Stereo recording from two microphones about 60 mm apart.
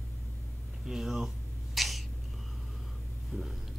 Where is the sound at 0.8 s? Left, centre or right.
Centre.